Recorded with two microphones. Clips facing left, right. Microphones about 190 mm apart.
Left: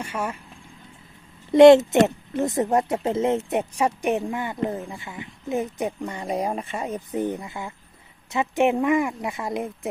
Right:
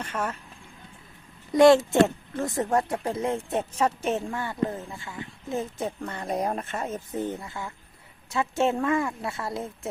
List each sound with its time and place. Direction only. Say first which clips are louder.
0.0 s speech: left 2 dB; 10° left (ahead or behind)
1.5 s speech: left 5 dB; 20° left (ahead or behind)